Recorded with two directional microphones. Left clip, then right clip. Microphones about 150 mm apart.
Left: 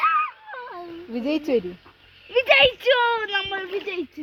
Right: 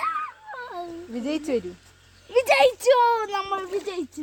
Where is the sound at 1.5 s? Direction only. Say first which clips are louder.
Left 4 dB; 45° left (ahead or behind).